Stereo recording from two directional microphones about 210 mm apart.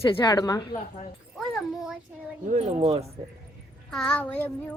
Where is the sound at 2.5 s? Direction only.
35° right (ahead or behind).